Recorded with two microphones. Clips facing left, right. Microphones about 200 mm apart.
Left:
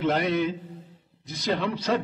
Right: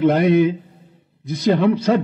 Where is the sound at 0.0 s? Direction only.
55° right (ahead or behind).